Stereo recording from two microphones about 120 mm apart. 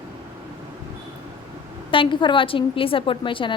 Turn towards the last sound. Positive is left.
turn(degrees=45)  # may be behind; listen again after turning